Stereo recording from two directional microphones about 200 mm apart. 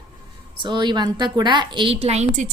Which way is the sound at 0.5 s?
25° right (ahead or behind).